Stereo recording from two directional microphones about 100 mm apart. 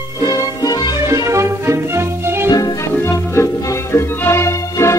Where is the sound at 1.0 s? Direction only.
30° right (ahead or behind).